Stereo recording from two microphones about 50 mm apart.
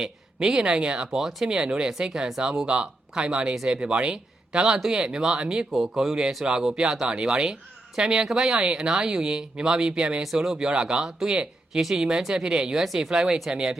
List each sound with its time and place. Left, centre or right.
0.0 s speech: centre